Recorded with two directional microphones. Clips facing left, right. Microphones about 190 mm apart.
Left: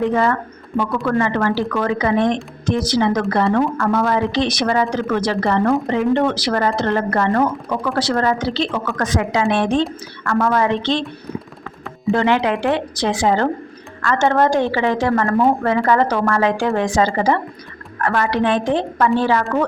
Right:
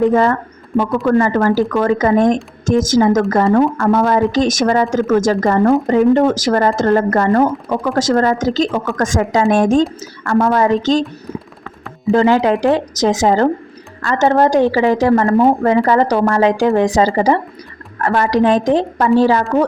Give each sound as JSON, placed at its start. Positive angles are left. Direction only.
{"t": 0.1, "sound": "a woman's voice", "side_deg": -40}
{"t": 10.2, "sound": "a woman's voice", "side_deg": -35}
{"t": 12.1, "sound": "a woman's voice", "side_deg": -35}